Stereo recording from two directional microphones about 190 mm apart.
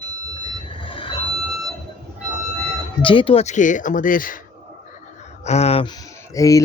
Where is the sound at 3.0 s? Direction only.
25° left (ahead or behind); by 4.4 s 45° left (ahead or behind).